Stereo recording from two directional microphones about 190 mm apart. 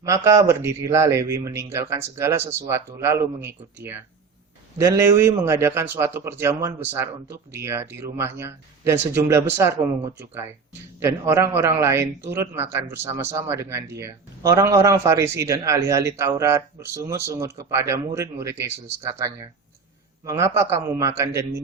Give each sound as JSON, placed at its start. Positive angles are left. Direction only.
{"t": 0.0, "sound": "speech", "side_deg": -15}
{"t": 4.8, "sound": "speech", "side_deg": -15}
{"t": 11.0, "sound": "speech", "side_deg": -15}